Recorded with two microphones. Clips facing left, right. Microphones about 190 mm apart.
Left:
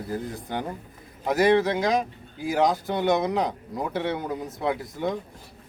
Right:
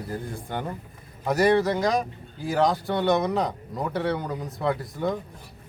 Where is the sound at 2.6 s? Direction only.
20° left (ahead or behind).